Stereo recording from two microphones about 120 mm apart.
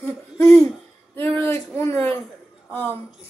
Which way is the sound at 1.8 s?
20° left (ahead or behind).